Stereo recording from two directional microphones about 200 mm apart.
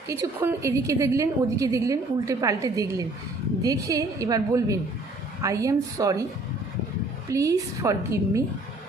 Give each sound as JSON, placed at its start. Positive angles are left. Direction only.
{"t": 0.1, "sound": "a woman's voice", "side_deg": -15}
{"t": 7.3, "sound": "a woman's voice", "side_deg": -15}